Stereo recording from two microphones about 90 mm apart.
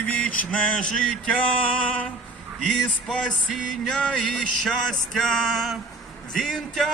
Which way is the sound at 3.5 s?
5° left (ahead or behind).